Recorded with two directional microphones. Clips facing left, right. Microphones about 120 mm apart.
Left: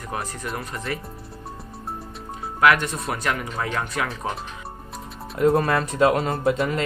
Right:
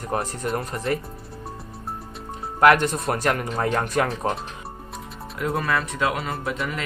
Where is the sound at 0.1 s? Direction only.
40° right (ahead or behind).